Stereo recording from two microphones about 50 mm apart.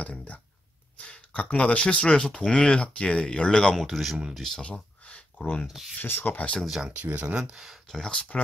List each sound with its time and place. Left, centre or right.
0.0 s speech: left
3.7 s speech: centre
4.6 s a sound: left
6.0 s speech: left
6.6 s speech: centre
7.0 s speech: right
7.3 s speech: centre
7.9 s speech: centre